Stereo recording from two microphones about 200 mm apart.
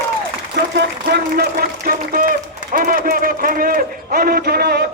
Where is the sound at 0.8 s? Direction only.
55° right (ahead or behind).